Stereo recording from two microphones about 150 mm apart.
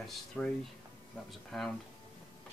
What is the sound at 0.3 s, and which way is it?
Speech, 5° left (ahead or behind).